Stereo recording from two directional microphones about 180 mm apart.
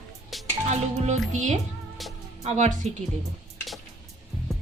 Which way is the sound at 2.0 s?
Centre (ahead or behind).